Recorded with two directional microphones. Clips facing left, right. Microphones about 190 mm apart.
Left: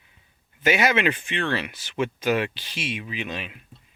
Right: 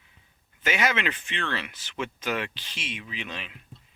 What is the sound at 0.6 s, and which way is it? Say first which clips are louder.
Speech: left 6 dB; 10° left (ahead or behind).